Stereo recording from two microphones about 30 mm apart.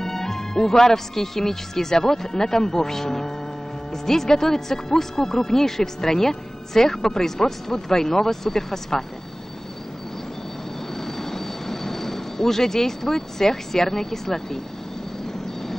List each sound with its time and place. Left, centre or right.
0.0 s speech: centre
11.0 s vehicle: centre